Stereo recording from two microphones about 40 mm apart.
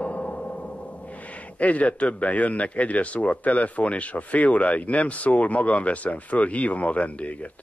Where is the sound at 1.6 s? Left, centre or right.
Left.